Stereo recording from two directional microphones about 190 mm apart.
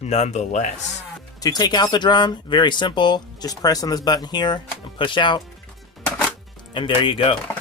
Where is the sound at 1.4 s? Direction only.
20° left (ahead or behind).